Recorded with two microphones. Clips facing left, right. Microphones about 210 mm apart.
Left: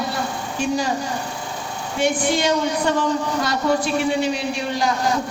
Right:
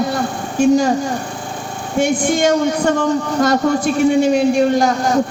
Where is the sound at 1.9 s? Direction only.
50° right (ahead or behind).